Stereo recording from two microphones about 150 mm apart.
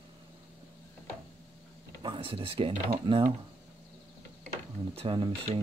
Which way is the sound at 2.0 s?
35° right (ahead or behind).